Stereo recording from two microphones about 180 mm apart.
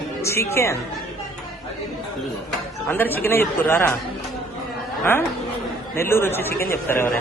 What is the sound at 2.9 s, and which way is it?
Speech, 10° left (ahead or behind).